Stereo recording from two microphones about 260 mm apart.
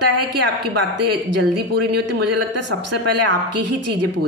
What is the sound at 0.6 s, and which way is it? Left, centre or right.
Speech, right.